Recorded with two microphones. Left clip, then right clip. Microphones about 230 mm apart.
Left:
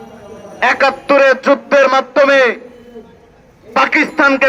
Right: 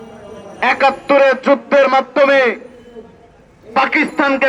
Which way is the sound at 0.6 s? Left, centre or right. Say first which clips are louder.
Left 1 dB; left.